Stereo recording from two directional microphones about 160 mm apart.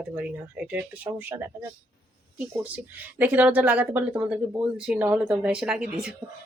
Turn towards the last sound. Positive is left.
turn(degrees=-5)  # may be behind; listen again after turning